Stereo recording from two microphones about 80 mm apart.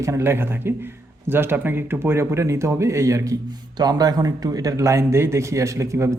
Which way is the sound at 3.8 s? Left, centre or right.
Right.